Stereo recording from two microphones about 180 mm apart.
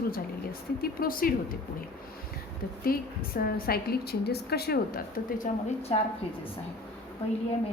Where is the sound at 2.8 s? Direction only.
55° left (ahead or behind); by 6.0 s 35° left (ahead or behind).